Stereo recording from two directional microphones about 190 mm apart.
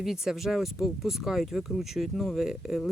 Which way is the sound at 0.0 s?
Centre (ahead or behind).